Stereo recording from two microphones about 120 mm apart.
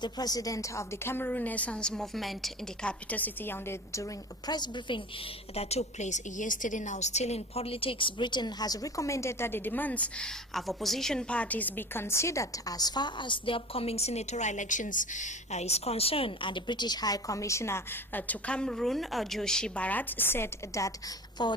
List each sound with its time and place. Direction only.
0.0 s a woman's voice: 35° left (ahead or behind); by 2.9 s centre (ahead or behind)
3.1 s a woman's voice: 15° left (ahead or behind); by 5.0 s 40° left (ahead or behind)
5.5 s a woman's voice: 60° left (ahead or behind); by 20.9 s 20° left (ahead or behind)
21.4 s a woman's voice: 40° left (ahead or behind)